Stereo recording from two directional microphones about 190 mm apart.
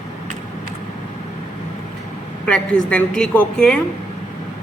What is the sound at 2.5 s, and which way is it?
A man's voice, 5° left (ahead or behind).